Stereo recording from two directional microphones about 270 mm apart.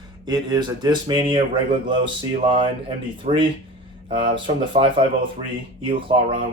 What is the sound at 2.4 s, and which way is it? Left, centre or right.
Speech, centre.